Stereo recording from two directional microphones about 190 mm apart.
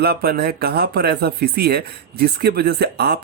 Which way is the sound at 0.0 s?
55° right (ahead or behind).